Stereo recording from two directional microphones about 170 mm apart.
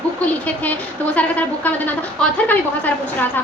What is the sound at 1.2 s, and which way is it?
A woman's voice, 10° left (ahead or behind).